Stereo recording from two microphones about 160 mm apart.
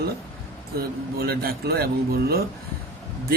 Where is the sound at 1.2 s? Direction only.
75° right (ahead or behind).